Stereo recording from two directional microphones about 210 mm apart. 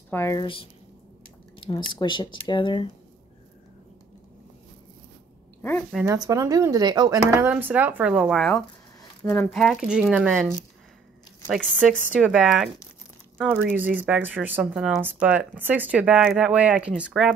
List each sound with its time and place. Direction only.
0.1 s a woman's voice: 15° left (ahead or behind)
5.6 s a woman's voice: 10° left (ahead or behind)
6.1 s speech: 15° right (ahead or behind); by 8.6 s centre (ahead or behind)
9.2 s speech: 15° left (ahead or behind)
9.5 s speech: centre (ahead or behind)
13.7 s speech: 5° right (ahead or behind)